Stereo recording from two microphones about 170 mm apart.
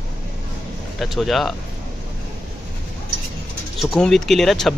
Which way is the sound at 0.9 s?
Centre (ahead or behind).